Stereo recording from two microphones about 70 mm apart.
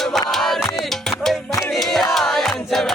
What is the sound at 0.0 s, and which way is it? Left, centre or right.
Music, centre.